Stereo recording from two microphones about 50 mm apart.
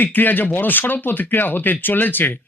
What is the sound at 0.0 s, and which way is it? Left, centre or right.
Speech, left.